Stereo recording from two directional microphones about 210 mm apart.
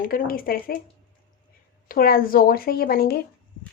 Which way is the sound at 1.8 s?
45° left (ahead or behind).